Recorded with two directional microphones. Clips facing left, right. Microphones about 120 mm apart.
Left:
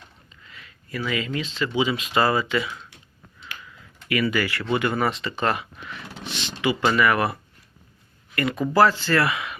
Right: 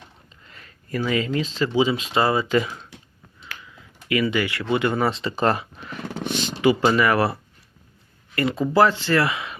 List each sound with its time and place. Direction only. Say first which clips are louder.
0.3 s speech: even; 40° right (ahead or behind); by 2.5 s 25° right (ahead or behind)
2.5 s speech: right 4 dB; 35° right (ahead or behind)
4.1 s speech: right 1 dB; 25° right (ahead or behind); by 6.7 s 40° right (ahead or behind)
6.8 s speech: right 2 dB; 30° right (ahead or behind)
8.4 s speech: right 1 dB; 30° right (ahead or behind)